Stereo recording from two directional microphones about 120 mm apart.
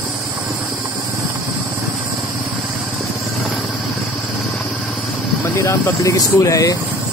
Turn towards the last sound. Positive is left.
turn(degrees=30)  # may be behind; listen again after turning